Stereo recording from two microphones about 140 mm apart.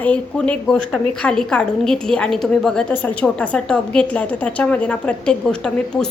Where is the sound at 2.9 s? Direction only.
15° left (ahead or behind).